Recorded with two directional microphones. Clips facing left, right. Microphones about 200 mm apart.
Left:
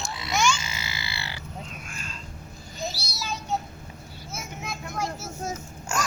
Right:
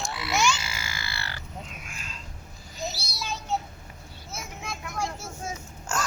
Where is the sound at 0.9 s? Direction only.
15° left (ahead or behind).